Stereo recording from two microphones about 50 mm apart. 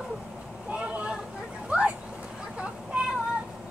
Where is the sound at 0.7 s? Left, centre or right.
Right.